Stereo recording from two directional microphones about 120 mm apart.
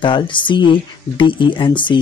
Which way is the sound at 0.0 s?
45° left (ahead or behind).